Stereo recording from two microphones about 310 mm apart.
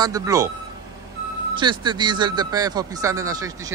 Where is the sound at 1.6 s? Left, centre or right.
Centre.